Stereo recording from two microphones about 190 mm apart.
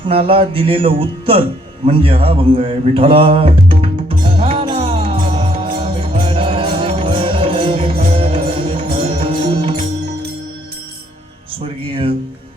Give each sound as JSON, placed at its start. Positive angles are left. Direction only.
{"t": 0.0, "sound": "speech", "side_deg": -30}
{"t": 4.3, "sound": "music", "side_deg": -30}
{"t": 11.6, "sound": "music", "side_deg": -30}